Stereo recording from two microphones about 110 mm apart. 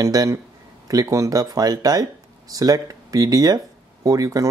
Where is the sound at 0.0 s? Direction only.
30° right (ahead or behind).